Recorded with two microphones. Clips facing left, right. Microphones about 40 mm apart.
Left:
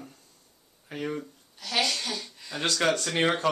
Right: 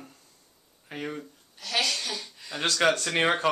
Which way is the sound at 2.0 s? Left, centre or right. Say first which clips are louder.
Left 1 dB; centre.